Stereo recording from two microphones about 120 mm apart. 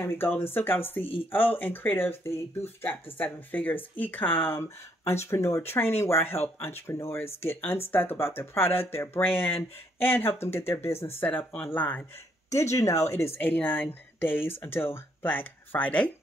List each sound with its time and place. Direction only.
0.0 s speech: 20° left (ahead or behind)
12.7 s speech: 25° left (ahead or behind)